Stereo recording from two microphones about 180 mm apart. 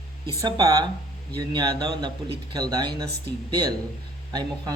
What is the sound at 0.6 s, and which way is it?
Speech, 20° right (ahead or behind).